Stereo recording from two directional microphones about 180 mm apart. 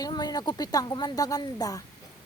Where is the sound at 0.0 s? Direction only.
20° left (ahead or behind).